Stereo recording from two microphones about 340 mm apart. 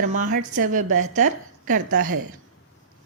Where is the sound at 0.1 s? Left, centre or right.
Right.